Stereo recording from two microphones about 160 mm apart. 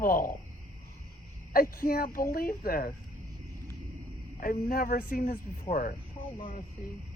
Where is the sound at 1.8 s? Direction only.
65° left (ahead or behind).